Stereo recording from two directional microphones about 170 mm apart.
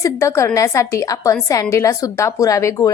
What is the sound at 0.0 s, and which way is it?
A woman's voice, 15° left (ahead or behind).